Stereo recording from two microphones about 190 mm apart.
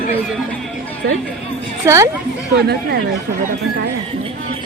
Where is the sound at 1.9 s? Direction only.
15° right (ahead or behind).